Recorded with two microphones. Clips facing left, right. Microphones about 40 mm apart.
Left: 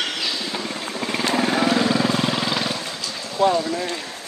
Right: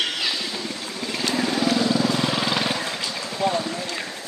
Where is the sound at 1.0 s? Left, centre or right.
Left.